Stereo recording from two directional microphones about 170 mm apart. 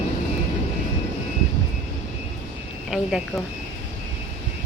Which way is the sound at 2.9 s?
Centre (ahead or behind).